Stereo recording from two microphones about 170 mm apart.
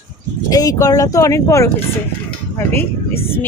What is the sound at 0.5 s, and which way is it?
Speech, 20° left (ahead or behind).